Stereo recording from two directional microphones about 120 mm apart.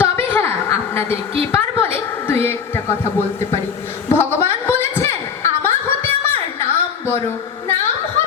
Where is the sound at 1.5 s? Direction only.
20° left (ahead or behind).